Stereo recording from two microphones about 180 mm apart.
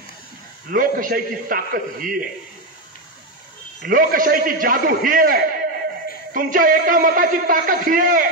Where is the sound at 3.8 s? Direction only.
50° right (ahead or behind).